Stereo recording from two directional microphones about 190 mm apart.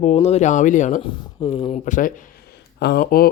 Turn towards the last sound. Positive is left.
turn(degrees=50)  # may be behind; listen again after turning